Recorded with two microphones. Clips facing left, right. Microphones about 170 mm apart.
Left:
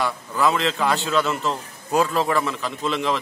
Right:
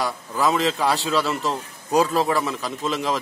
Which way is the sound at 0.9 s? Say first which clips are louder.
Left 1 dB; centre (ahead or behind).